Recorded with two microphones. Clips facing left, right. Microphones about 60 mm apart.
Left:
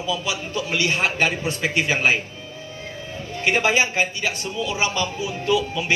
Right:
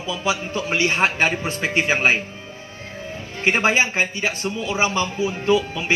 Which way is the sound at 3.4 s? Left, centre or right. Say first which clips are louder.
Right 1 dB; right.